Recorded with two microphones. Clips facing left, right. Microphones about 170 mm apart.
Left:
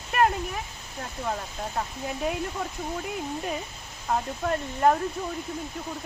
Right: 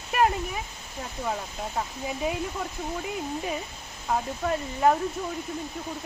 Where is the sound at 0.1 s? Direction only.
Centre (ahead or behind).